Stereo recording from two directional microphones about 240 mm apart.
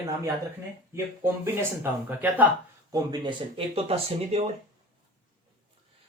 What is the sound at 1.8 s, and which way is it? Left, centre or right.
Speech, centre.